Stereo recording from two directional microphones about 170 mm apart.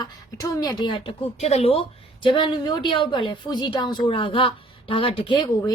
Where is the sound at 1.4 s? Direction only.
40° left (ahead or behind).